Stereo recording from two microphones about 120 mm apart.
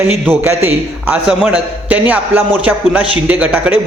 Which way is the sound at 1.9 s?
15° right (ahead or behind).